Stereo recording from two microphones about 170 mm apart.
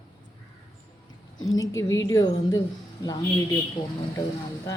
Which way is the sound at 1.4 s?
20° left (ahead or behind).